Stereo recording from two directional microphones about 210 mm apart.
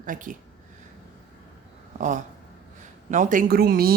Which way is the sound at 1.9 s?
35° right (ahead or behind).